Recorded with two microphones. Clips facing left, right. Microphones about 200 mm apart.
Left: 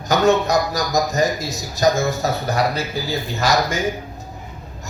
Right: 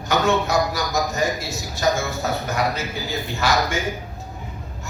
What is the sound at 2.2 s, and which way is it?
A man's voice, 40° left (ahead or behind).